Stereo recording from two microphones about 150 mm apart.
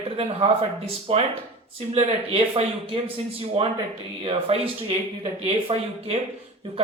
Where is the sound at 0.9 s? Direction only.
40° right (ahead or behind).